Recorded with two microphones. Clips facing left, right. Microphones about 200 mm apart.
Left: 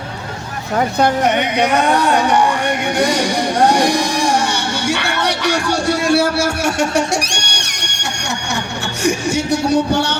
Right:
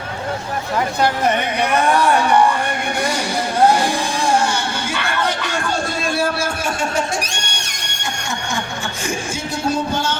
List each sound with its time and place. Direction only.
1.2 s speech: 75° left (ahead or behind)
2.6 s a sound: 80° left
9.0 s speech: 70° left (ahead or behind)